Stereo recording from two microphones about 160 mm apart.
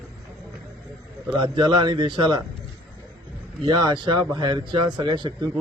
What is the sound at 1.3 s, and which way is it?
A man's voice, 30° right (ahead or behind).